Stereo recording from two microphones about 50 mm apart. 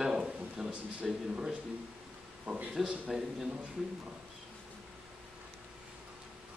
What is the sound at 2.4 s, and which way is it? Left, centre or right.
Speech, right.